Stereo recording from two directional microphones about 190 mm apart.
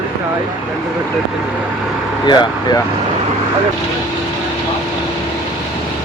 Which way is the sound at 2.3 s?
25° left (ahead or behind).